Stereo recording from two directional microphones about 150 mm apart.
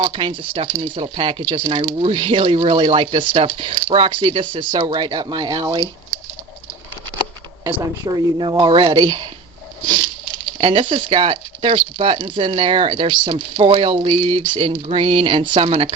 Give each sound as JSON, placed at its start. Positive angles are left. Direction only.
{"t": 0.0, "sound": "speech", "side_deg": -35}
{"t": 8.0, "sound": "speech", "side_deg": -30}
{"t": 10.6, "sound": "speech", "side_deg": -35}